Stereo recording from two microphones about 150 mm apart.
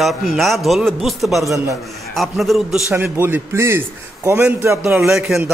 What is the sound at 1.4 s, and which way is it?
Speech, 20° right (ahead or behind).